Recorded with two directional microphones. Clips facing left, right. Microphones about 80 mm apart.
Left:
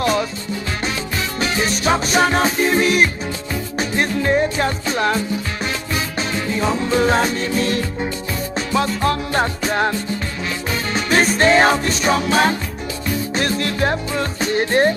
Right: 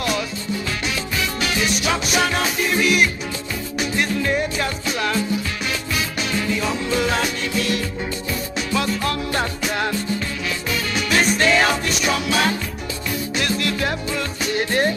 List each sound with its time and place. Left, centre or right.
0.0 s music: left
1.4 s music: left